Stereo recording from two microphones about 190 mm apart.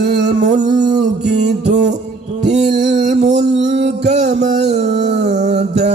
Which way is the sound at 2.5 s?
40° right (ahead or behind).